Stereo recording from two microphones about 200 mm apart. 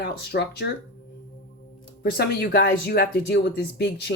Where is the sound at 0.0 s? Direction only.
60° left (ahead or behind).